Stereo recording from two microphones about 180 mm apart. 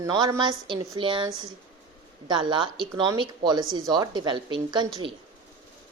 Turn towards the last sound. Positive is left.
turn(degrees=-25)  # may be behind; listen again after turning